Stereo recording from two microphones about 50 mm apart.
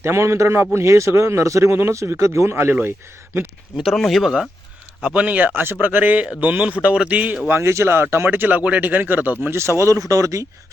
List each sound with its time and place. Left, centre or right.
0.0 s a man's voice: right
1.7 s speech: right
3.9 s speech: centre
5.0 s a man's voice: right
5.5 s speech: right
5.8 s a man's voice: right
7.4 s speech: right
8.3 s speech: right
9.5 s speech: right